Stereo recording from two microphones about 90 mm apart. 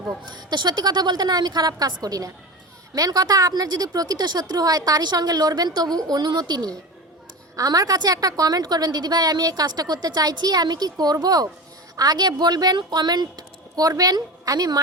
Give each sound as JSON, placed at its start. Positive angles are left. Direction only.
{"t": 0.3, "sound": "a woman's voice", "side_deg": -55}